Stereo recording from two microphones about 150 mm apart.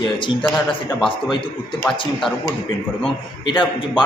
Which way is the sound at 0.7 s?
35° left (ahead or behind).